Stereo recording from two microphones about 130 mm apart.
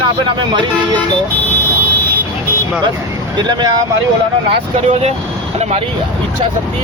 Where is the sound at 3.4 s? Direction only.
35° right (ahead or behind).